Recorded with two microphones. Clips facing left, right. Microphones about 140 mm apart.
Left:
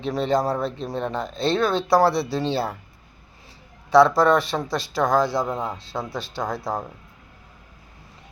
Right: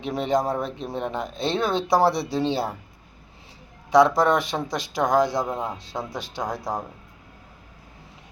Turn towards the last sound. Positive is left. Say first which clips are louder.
# left 1 dB
turn(degrees=-15)  # may be behind; listen again after turning